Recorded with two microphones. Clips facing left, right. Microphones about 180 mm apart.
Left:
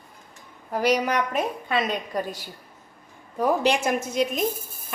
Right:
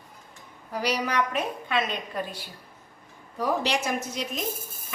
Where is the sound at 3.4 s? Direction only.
50° left (ahead or behind).